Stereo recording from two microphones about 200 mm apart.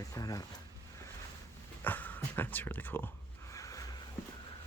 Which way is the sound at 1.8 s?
10° left (ahead or behind).